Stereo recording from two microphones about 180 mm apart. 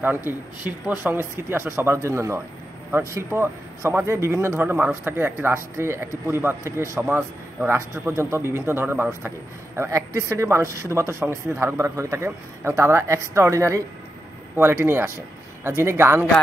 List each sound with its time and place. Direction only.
0.0 s speech: 10° right (ahead or behind)